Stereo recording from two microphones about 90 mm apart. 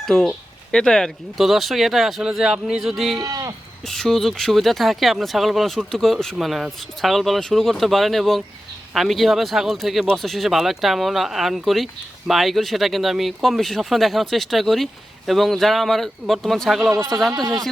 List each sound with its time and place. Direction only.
0.0 s speech: 5° left (ahead or behind)
3.2 s speech: 40° right (ahead or behind)
3.8 s speech: centre (ahead or behind)
16.9 s speech: 35° right (ahead or behind)
17.3 s speech: 45° right (ahead or behind)